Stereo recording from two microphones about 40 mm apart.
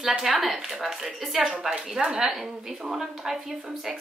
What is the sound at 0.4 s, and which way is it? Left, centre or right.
A woman's voice, centre.